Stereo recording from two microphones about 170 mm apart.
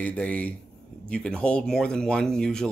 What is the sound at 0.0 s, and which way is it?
Speech, 10° left (ahead or behind).